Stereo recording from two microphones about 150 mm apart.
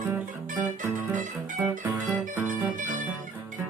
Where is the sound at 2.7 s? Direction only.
60° right (ahead or behind).